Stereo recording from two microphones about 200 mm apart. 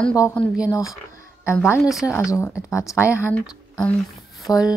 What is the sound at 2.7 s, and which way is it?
Speech, 15° left (ahead or behind).